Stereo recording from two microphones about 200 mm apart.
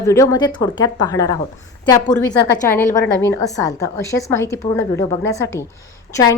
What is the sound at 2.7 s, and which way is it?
A woman's voice, 10° left (ahead or behind).